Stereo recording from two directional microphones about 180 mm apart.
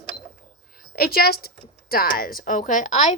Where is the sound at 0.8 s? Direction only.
60° left (ahead or behind).